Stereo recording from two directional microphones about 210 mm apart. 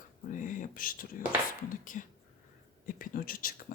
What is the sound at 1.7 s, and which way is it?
Speech, 40° left (ahead or behind).